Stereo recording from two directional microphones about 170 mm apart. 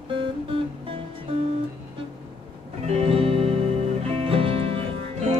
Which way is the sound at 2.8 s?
35° right (ahead or behind).